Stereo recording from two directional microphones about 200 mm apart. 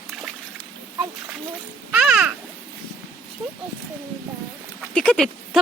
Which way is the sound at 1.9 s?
5° right (ahead or behind).